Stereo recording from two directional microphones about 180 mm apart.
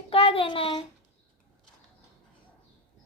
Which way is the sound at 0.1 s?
30° left (ahead or behind).